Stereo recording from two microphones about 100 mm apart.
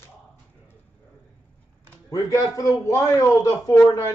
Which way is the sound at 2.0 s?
35° left (ahead or behind).